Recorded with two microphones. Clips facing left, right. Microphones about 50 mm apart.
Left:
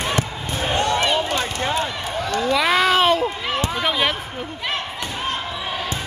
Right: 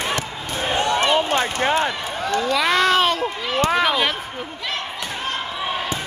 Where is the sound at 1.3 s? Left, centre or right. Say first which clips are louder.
Right 3 dB; right.